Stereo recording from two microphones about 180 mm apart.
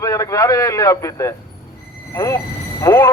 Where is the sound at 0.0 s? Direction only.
15° left (ahead or behind).